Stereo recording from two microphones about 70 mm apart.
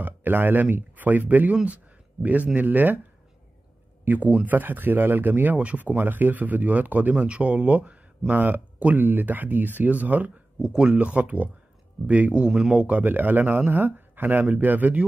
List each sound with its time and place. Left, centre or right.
0.0 s speech: right
4.0 s speech: right
10.6 s speech: centre